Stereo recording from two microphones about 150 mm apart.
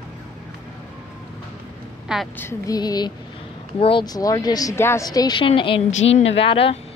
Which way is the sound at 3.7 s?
40° left (ahead or behind).